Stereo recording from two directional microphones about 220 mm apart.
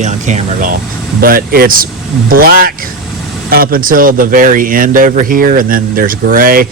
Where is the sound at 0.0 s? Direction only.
35° right (ahead or behind).